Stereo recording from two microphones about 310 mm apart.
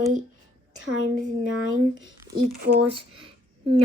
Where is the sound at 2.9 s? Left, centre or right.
Centre.